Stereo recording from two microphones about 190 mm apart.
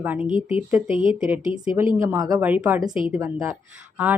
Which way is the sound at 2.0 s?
20° right (ahead or behind).